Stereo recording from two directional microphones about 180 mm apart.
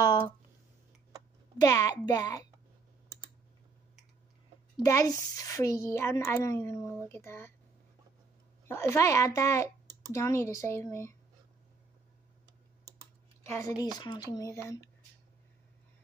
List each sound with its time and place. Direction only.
1.6 s speech: 20° left (ahead or behind)
4.8 s speech: 15° left (ahead or behind)
8.6 s speech: 15° left (ahead or behind)
13.5 s speech: 15° left (ahead or behind)